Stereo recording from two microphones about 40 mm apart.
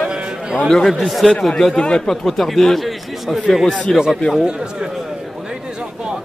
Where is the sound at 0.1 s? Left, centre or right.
Centre.